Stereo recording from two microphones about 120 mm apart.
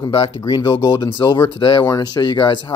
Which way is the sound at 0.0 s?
45° left (ahead or behind).